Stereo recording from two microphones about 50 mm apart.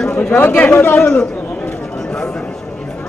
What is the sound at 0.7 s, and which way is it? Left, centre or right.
Speech, left.